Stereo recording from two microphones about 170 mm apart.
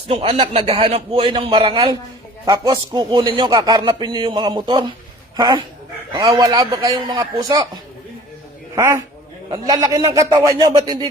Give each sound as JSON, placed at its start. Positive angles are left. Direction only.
{"t": 0.1, "sound": "a man's voice", "side_deg": -30}
{"t": 8.7, "sound": "a man's voice", "side_deg": -15}